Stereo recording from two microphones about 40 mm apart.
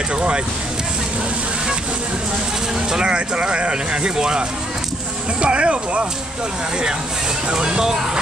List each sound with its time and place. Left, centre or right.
0.1 s speech: right
2.9 s speech: right
7.4 s speech: right